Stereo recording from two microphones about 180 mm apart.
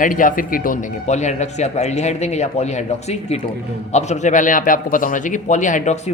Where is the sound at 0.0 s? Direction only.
50° left (ahead or behind).